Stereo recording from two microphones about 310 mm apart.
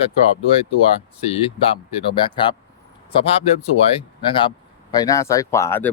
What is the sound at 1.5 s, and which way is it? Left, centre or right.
Speech, centre.